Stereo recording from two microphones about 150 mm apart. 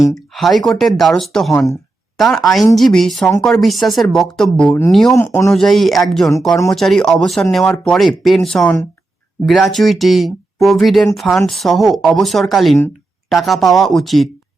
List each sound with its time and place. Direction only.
0.3 s speech: centre (ahead or behind)
5.1 s speech: 15° left (ahead or behind)
5.5 s speech: centre (ahead or behind)